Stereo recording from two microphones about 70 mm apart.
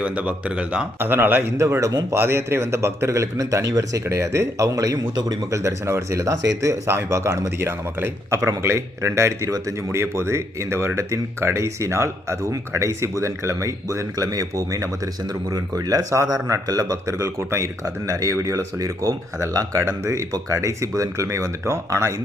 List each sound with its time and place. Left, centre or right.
0.0 s speech: centre
0.9 s speech: right
1.5 s speech: right
2.1 s speech: right
15.2 s speech: right